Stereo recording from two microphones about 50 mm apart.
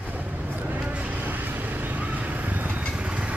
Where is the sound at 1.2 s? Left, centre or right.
Right.